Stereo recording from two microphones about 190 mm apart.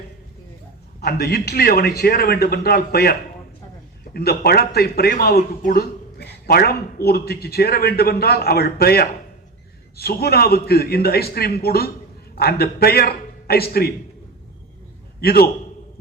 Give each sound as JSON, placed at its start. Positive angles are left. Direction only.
{"t": 1.0, "sound": "a man's voice", "side_deg": 55}
{"t": 15.2, "sound": "a man's voice", "side_deg": 55}